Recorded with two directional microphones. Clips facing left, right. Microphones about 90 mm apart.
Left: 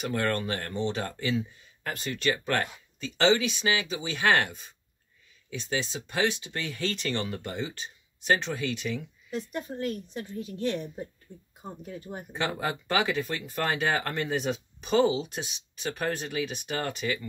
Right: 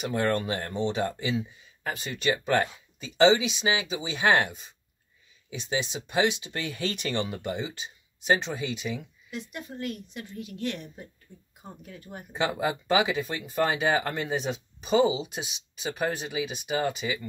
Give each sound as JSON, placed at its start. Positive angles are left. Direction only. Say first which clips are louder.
{"t": 0.1, "sound": "speech", "louder": "right 3 dB", "side_deg": -20}
{"t": 1.9, "sound": "speech", "louder": "right 1 dB", "side_deg": -5}
{"t": 5.5, "sound": "speech", "louder": "right 1 dB", "side_deg": -15}
{"t": 9.3, "sound": "a woman's voice", "louder": "left 4 dB", "side_deg": 35}
{"t": 12.3, "sound": "speech", "louder": "right 3 dB", "side_deg": -10}